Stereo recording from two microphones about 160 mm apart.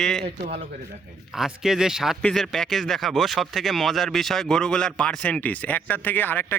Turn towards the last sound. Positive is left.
turn(degrees=10)  # may be behind; listen again after turning